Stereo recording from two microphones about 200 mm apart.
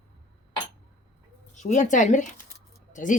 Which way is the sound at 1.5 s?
35° left (ahead or behind).